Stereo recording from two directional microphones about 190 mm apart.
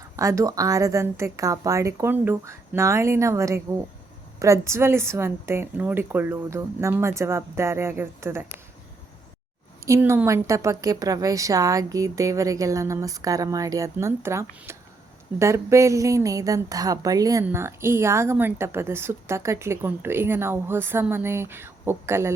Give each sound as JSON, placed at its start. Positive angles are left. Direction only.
{"t": 0.2, "sound": "a woman's voice", "side_deg": -15}
{"t": 9.8, "sound": "a woman's voice", "side_deg": -15}